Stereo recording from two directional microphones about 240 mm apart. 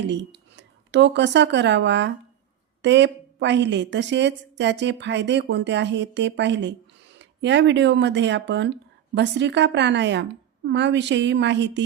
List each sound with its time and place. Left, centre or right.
0.1 s speech: right